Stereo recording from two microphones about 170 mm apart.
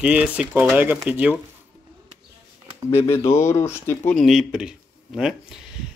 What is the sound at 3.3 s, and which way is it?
Speech, 15° left (ahead or behind).